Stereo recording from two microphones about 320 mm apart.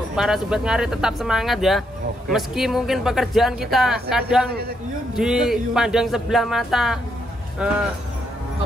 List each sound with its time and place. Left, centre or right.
0.1 s speech: centre